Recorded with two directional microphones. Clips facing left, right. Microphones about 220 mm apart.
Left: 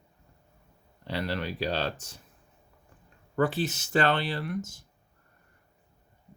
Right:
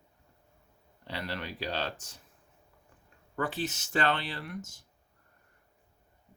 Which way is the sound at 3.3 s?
35° left (ahead or behind).